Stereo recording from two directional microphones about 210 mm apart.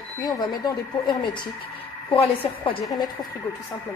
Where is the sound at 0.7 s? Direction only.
20° left (ahead or behind).